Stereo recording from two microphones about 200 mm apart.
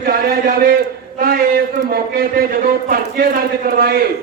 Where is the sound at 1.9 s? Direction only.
50° right (ahead or behind).